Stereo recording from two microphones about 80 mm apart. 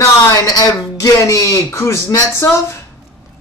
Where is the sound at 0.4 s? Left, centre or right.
Left.